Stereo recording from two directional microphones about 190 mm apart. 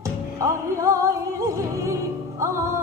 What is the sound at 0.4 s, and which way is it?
Music, 15° right (ahead or behind).